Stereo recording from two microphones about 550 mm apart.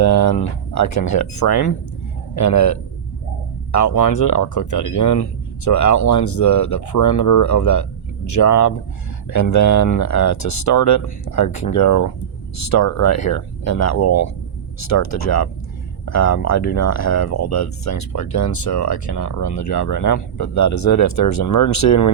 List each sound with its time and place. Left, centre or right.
0.0 s speech: left